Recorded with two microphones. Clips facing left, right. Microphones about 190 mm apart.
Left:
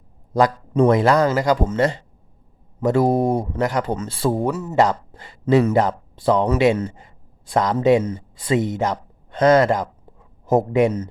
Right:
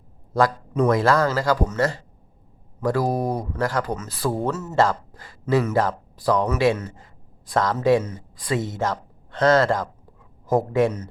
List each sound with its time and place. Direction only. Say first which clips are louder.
0.7 s speech: left 5 dB; 25° left (ahead or behind)
4.4 s speech: left 1 dB; 15° left (ahead or behind)